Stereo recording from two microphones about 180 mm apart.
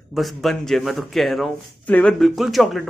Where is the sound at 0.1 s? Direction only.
Centre (ahead or behind).